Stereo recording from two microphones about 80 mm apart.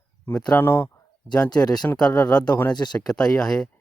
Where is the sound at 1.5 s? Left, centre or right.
Left.